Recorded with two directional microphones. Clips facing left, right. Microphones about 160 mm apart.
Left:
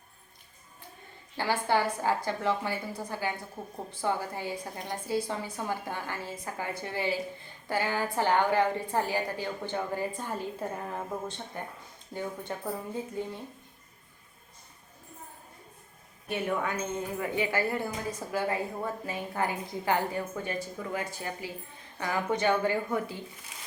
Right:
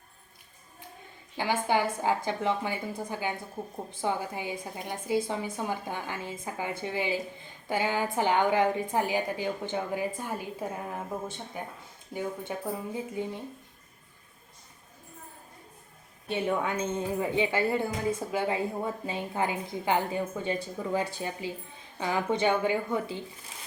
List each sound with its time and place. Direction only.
1.4 s a woman's voice: 15° right (ahead or behind)
16.3 s a woman's voice: 20° right (ahead or behind)